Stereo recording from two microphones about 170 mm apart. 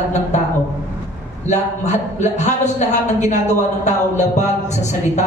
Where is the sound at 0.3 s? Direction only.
45° left (ahead or behind).